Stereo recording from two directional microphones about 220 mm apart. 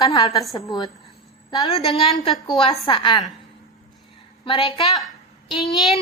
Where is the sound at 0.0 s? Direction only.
15° left (ahead or behind).